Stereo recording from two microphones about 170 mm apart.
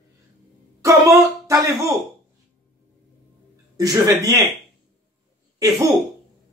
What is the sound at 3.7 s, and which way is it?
Speech, 20° right (ahead or behind).